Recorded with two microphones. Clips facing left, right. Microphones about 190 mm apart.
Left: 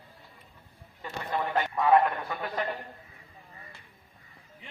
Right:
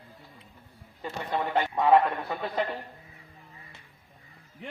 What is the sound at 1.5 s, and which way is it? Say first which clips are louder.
A man's voice: right 2 dB; 20° right (ahead or behind).